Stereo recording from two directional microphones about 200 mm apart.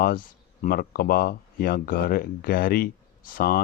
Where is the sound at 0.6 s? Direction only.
45° left (ahead or behind).